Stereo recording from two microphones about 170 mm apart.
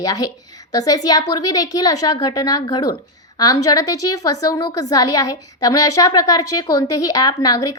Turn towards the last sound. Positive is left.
turn(degrees=20)  # may be behind; listen again after turning